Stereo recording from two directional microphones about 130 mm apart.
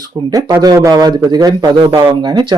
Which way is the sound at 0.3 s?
30° right (ahead or behind).